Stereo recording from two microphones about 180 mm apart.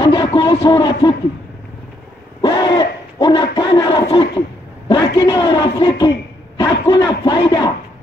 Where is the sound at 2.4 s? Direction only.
25° left (ahead or behind).